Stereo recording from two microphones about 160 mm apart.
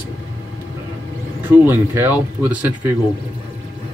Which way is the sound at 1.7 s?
15° right (ahead or behind).